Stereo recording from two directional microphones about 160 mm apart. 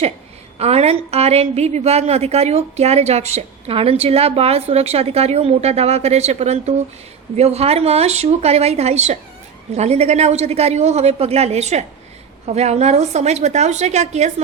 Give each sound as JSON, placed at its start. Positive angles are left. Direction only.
{"t": 0.6, "sound": "a woman's voice", "side_deg": -40}